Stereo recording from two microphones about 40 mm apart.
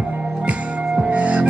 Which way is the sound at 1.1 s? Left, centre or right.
Right.